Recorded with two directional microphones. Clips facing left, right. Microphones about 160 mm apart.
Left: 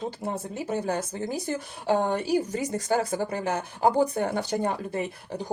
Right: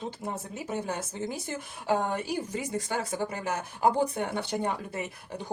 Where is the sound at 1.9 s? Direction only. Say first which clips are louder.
Left 4 dB; 35° left (ahead or behind).